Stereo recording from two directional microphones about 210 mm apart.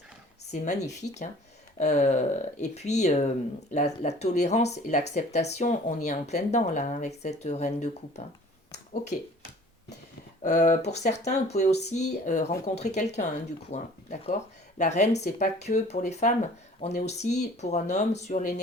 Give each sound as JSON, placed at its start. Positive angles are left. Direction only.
{"t": 0.5, "sound": "speech", "side_deg": 35}
{"t": 10.4, "sound": "speech", "side_deg": 35}